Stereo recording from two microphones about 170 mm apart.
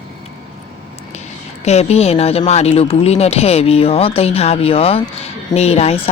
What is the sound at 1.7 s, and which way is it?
A woman's voice, 40° left (ahead or behind).